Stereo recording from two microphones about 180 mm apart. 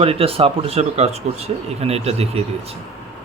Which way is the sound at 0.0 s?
35° right (ahead or behind).